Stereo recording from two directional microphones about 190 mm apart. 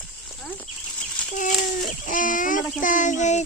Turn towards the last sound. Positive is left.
turn(degrees=40)  # may be behind; listen again after turning